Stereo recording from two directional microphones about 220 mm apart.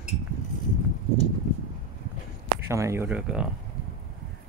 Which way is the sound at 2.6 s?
15° right (ahead or behind).